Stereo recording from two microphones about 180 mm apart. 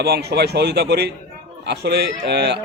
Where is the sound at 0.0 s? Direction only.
65° right (ahead or behind).